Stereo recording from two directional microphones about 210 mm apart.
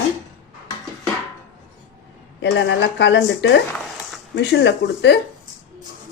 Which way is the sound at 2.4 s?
60° left (ahead or behind).